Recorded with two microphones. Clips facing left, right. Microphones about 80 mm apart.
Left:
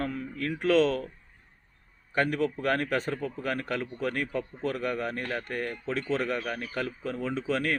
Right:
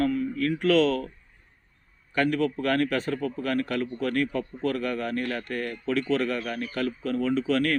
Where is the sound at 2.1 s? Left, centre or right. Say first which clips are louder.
Right 3 dB; left.